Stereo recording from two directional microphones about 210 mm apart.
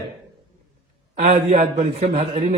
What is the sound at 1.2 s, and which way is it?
A man's voice, 40° right (ahead or behind).